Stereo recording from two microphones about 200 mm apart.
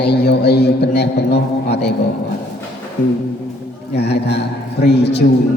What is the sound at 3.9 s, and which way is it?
Speech, 55° left (ahead or behind).